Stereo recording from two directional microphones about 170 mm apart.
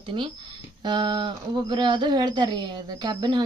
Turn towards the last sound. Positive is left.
turn(degrees=-25)  # may be behind; listen again after turning